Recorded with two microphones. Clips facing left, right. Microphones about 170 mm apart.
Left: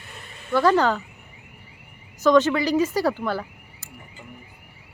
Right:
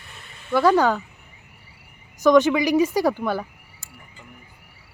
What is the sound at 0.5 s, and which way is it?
Speech, 10° right (ahead or behind).